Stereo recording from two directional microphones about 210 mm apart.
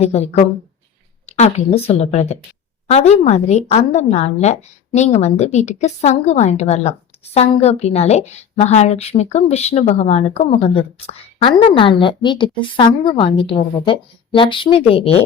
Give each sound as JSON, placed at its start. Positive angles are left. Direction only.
{"t": 0.0, "sound": "a woman's voice", "side_deg": 30}